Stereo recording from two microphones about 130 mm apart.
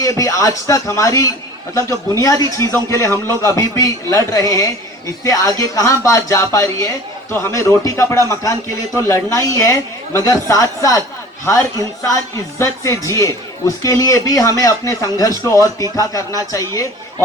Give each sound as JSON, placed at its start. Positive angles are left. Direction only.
{"t": 0.0, "sound": "speech", "side_deg": 25}